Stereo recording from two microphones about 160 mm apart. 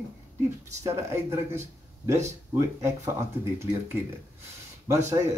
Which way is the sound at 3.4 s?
15° right (ahead or behind).